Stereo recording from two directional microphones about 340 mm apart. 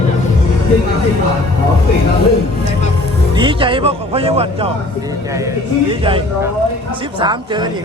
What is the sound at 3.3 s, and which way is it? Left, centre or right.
Speech, centre.